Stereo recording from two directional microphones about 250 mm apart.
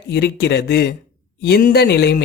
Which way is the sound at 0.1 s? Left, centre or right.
Left.